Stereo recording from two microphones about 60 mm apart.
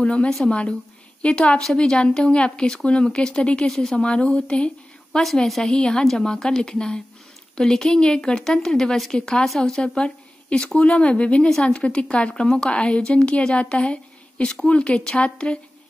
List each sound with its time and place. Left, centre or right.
0.0 s a woman's voice: centre
5.2 s a woman's voice: centre